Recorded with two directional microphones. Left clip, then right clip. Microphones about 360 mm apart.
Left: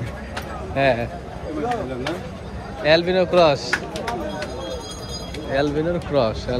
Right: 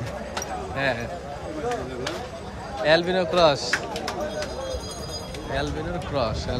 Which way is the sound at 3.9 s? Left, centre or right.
Centre.